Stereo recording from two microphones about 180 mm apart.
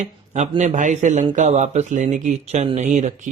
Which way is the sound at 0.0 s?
40° right (ahead or behind).